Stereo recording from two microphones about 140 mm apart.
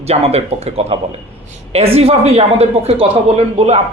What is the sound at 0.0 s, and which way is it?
A man's voice, 50° right (ahead or behind).